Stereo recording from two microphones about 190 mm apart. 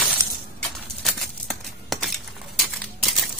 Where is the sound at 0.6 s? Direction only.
Centre (ahead or behind).